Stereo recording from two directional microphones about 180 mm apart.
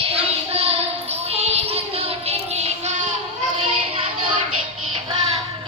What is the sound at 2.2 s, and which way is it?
Child singing, 35° right (ahead or behind).